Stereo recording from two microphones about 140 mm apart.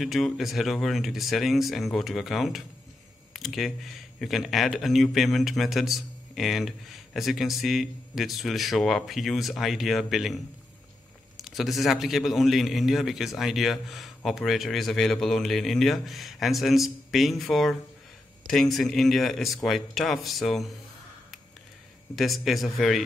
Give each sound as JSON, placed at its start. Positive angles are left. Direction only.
{"t": 0.0, "sound": "a man's voice", "side_deg": 0}
{"t": 22.1, "sound": "a man's voice", "side_deg": 0}